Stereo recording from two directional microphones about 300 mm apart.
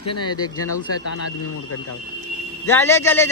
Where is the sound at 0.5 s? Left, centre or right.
Left.